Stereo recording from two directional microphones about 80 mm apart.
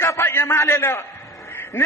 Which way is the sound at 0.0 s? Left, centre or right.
Left.